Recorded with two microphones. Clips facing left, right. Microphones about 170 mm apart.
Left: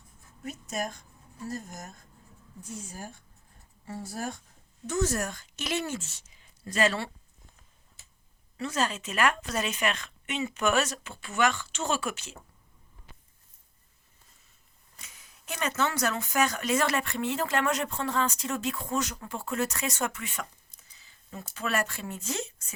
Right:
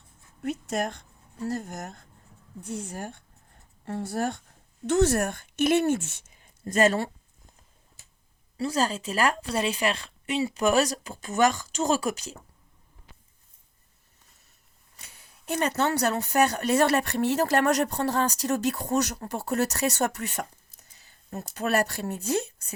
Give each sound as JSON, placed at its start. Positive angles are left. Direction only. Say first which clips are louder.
{"t": 0.4, "sound": "a woman's voice", "louder": "right 6 dB", "side_deg": -65}
{"t": 8.5, "sound": "speech", "louder": "right 4 dB", "side_deg": -35}
{"t": 15.0, "sound": "a sound", "louder": "right 8 dB", "side_deg": -35}
{"t": 15.7, "sound": "speech", "louder": "right 1 dB", "side_deg": -35}